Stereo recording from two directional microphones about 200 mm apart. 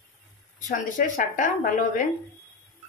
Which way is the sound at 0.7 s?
40° left (ahead or behind).